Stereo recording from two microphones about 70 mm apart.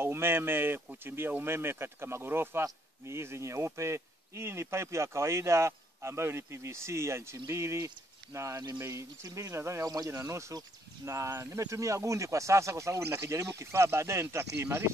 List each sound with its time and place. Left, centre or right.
0.0 s speech: right